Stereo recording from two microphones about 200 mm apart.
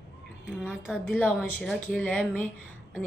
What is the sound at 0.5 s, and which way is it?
A woman's voice, centre (ahead or behind).